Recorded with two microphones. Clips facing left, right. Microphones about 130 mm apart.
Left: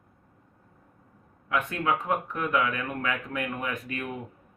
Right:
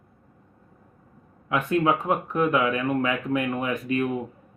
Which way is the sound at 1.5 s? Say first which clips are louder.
Right 5 dB; 20° right (ahead or behind).